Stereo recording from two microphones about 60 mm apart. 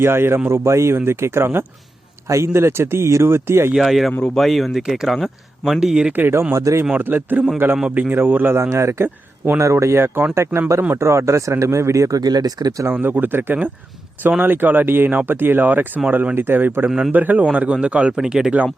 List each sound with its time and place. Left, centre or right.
0.0 s speech: right
3.8 s speech: centre
6.1 s speech: right
6.5 s speech: right
7.0 s speech: right
7.9 s a man's voice: centre
8.1 s speech: right
8.7 s speech: right
12.9 s a man's voice: right
16.3 s speech: right
16.8 s a man's voice: centre
17.1 s a man's voice: right; by 18.5 s centre